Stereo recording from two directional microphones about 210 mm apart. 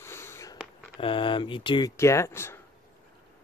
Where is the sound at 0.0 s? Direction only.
10° left (ahead or behind).